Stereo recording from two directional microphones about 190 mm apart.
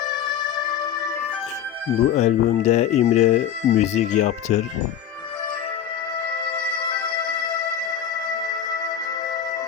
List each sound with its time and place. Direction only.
0.0 s music: 25° left (ahead or behind)
2.1 s speech: 35° left (ahead or behind)
6.3 s music: 25° left (ahead or behind)